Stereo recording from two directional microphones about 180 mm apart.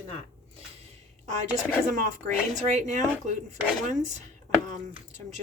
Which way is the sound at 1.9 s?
40° right (ahead or behind).